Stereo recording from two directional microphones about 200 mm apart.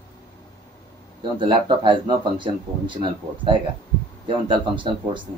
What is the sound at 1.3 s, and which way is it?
Speech, 25° right (ahead or behind).